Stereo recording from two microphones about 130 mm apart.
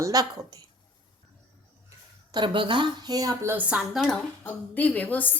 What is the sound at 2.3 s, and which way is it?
Speech, 40° right (ahead or behind).